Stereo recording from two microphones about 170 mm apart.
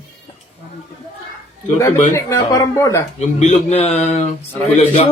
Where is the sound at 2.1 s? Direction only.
20° left (ahead or behind).